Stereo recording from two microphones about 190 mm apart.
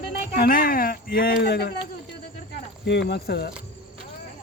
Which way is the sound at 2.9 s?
60° left (ahead or behind).